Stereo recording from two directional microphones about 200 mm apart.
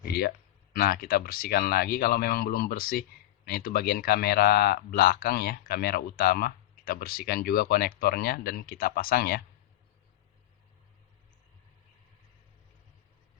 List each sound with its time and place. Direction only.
0.1 s speech: 50° left (ahead or behind)